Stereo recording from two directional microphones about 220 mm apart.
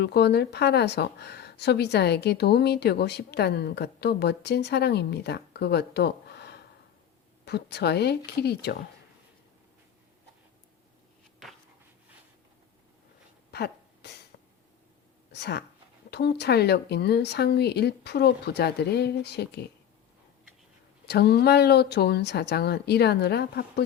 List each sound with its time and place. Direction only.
0.0 s speech: 50° left (ahead or behind)
13.5 s sneeze: 50° left (ahead or behind)
15.3 s speech: 50° left (ahead or behind)
21.1 s speech: 50° left (ahead or behind)